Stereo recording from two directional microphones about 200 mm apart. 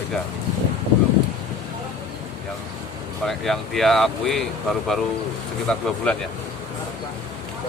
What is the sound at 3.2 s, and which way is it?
Speech, centre (ahead or behind).